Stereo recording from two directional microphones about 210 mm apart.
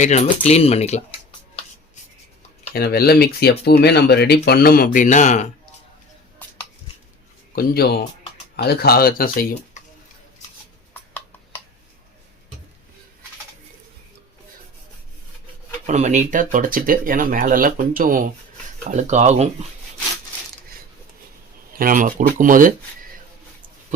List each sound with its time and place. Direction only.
0.0 s speech: 30° left (ahead or behind)
2.7 s speech: 50° left (ahead or behind)
7.5 s speech: 45° left (ahead or behind)
15.9 s speech: 35° right (ahead or behind)
21.8 s speech: 40° right (ahead or behind)